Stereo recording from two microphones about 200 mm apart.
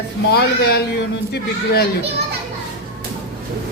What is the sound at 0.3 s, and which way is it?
Speech, 55° left (ahead or behind).